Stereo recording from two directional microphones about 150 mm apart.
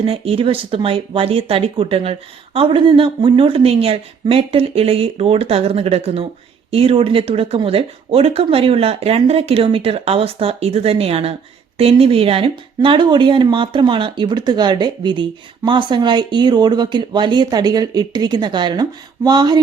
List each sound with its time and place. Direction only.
0.0 s speech: 40° right (ahead or behind)